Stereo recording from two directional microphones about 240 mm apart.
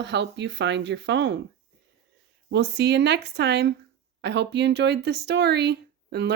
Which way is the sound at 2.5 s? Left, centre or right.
Right.